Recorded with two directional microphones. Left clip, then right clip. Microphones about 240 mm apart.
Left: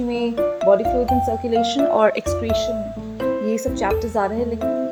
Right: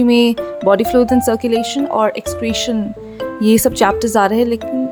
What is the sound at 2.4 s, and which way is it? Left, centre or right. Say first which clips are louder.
A woman's voice: right 2 dB; right.